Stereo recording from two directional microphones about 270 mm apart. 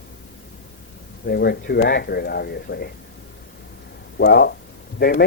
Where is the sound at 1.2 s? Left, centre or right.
Left.